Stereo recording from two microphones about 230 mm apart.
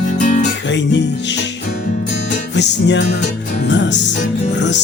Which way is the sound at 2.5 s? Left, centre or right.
Left.